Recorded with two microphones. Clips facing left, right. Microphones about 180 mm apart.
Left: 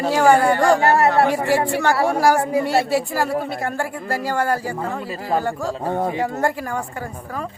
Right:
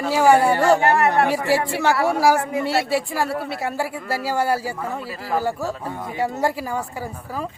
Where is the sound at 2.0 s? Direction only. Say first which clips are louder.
Left 1 dB; centre (ahead or behind).